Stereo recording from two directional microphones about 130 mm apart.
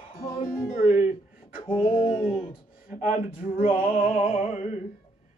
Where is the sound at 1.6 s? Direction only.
40° left (ahead or behind).